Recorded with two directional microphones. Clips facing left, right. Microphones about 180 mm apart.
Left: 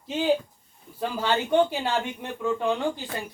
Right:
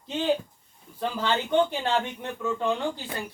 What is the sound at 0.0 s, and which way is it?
Speech, 10° left (ahead or behind).